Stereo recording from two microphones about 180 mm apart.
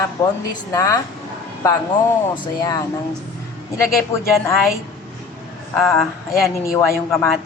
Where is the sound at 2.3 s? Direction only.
25° left (ahead or behind).